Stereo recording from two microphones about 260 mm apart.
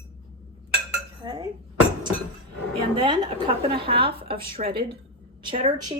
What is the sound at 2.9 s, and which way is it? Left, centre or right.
A woman's voice, centre.